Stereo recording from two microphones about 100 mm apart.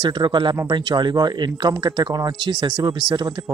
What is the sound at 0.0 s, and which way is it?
Speech, 50° right (ahead or behind).